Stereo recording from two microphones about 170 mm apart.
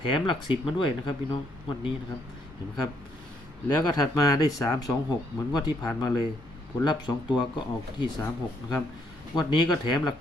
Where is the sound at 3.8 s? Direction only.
20° left (ahead or behind).